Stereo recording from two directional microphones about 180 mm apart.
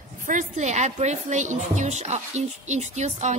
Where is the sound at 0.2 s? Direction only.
45° right (ahead or behind).